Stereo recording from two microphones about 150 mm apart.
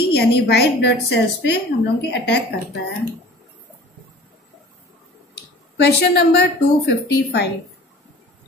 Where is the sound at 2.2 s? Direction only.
90° left.